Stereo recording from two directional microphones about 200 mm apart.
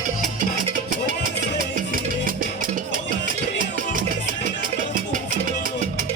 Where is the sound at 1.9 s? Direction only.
45° right (ahead or behind).